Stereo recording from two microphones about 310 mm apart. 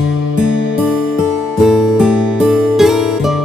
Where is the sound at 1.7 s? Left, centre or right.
Centre.